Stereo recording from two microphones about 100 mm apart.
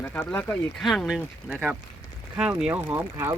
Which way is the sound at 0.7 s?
5° left (ahead or behind).